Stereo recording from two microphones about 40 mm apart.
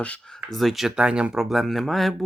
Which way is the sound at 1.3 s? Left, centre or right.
Centre.